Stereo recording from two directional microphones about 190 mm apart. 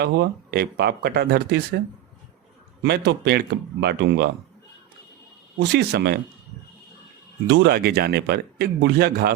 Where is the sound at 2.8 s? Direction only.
60° right (ahead or behind).